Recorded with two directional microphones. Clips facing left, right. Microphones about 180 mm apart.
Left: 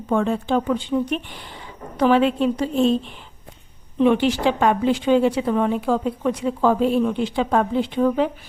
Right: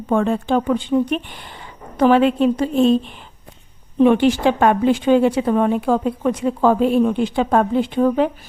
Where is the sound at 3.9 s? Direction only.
50° right (ahead or behind).